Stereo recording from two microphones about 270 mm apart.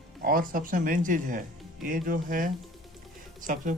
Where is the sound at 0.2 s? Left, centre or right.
Right.